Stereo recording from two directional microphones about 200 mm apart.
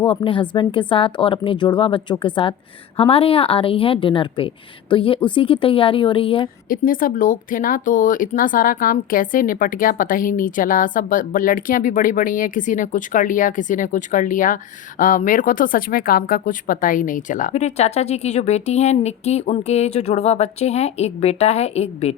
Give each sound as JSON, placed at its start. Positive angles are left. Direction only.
{"t": 0.1, "sound": "a woman's voice", "side_deg": 25}
{"t": 6.7, "sound": "speech", "side_deg": 45}